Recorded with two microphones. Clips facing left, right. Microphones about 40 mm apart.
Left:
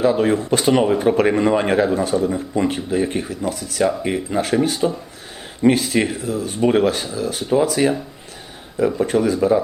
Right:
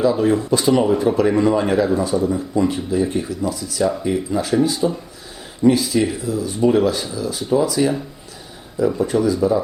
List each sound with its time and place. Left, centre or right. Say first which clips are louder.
0.0 s speech: even; left